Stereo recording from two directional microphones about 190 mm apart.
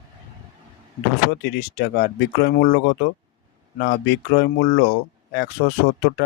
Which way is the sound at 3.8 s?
65° left (ahead or behind).